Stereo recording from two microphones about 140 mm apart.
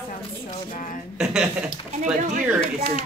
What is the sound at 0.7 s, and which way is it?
Speech, 70° left (ahead or behind).